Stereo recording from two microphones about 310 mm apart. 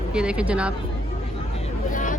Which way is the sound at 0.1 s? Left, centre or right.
Centre.